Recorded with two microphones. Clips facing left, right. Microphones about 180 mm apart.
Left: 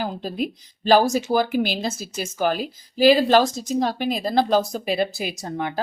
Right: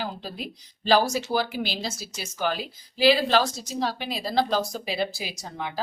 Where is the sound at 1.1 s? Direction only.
50° left (ahead or behind).